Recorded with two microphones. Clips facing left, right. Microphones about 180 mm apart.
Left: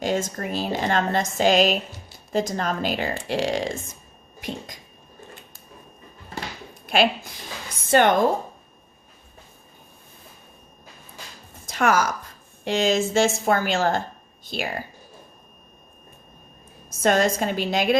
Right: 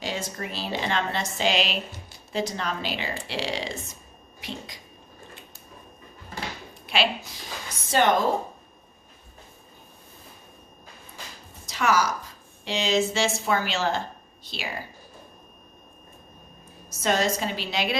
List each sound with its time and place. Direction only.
0.0 s a woman's voice: 50° left (ahead or behind)
4.4 s a sound: 45° left (ahead or behind)
6.8 s a woman's voice: 50° left (ahead or behind)
11.6 s a sound: 50° left (ahead or behind)
12.6 s a woman's voice: 50° left (ahead or behind)
17.0 s a woman's voice: 50° left (ahead or behind)